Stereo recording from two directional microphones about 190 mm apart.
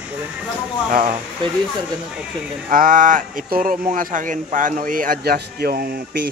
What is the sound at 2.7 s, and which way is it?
Speech, 45° right (ahead or behind).